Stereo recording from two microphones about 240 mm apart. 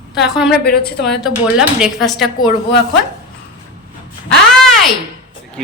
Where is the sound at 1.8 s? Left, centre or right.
Centre.